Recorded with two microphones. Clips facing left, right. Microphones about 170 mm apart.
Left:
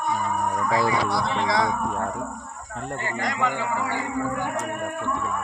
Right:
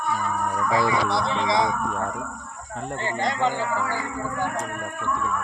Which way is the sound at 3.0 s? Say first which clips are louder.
Right 3 dB; 30° right (ahead or behind).